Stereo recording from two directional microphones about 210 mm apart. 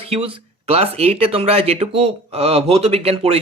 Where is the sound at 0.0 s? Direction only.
25° right (ahead or behind).